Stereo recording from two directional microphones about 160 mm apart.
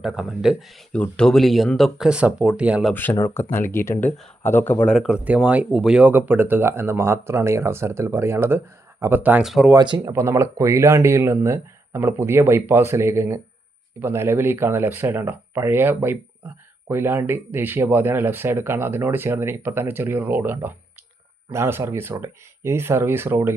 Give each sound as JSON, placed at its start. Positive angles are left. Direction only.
{"t": 0.0, "sound": "speech", "side_deg": -5}
{"t": 2.9, "sound": "speech", "side_deg": 10}
{"t": 9.7, "sound": "speech", "side_deg": -30}
{"t": 10.1, "sound": "speech", "side_deg": -15}